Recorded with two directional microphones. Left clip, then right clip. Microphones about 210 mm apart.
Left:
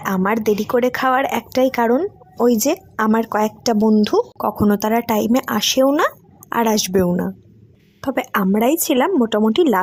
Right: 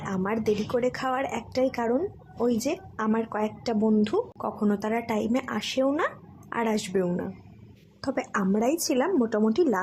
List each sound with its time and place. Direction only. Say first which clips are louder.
0.0 s a woman's voice: left 10 dB; 40° left (ahead or behind)
8.0 s a woman's voice: left 8 dB; 35° left (ahead or behind)